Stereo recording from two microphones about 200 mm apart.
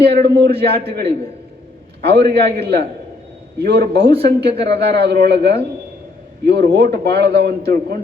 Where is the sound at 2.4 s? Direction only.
55° right (ahead or behind).